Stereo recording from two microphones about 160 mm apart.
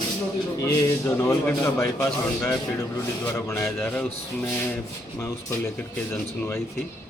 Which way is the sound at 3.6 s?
5° left (ahead or behind).